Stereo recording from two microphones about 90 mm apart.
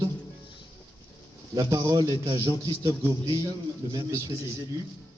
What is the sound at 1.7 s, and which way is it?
A man's voice, 45° right (ahead or behind).